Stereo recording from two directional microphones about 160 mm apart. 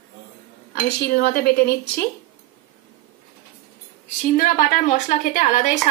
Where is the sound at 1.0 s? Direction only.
80° left.